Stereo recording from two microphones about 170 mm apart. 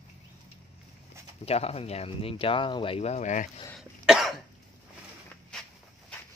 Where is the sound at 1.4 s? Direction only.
35° left (ahead or behind).